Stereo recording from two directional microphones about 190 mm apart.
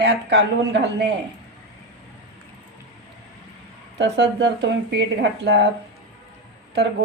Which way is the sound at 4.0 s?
65° right (ahead or behind).